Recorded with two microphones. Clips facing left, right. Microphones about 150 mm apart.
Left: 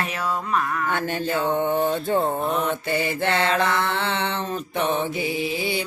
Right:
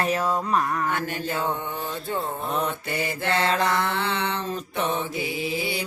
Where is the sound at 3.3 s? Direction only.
35° right (ahead or behind).